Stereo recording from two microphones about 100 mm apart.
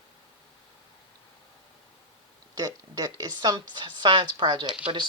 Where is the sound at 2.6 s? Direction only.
40° right (ahead or behind).